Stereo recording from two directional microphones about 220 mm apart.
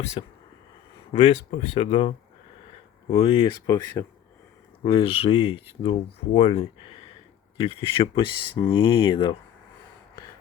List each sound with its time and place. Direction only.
0.0 s speech: 30° left (ahead or behind)